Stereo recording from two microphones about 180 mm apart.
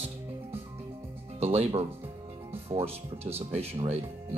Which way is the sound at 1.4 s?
35° right (ahead or behind).